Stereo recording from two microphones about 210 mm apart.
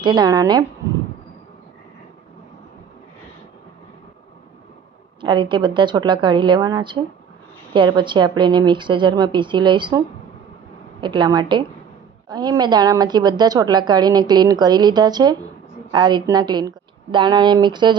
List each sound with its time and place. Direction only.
0.0 s a woman's voice: 20° right (ahead or behind)
5.2 s a woman's voice: 20° right (ahead or behind)
11.0 s a woman's voice: 20° right (ahead or behind)